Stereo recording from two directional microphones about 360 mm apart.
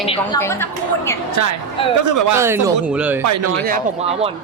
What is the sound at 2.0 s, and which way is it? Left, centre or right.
Speech, right.